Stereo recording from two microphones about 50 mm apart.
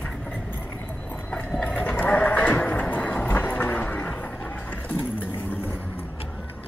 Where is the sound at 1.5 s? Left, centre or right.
Left.